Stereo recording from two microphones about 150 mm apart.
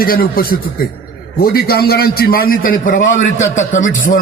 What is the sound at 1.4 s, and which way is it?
A man's voice, 90° left.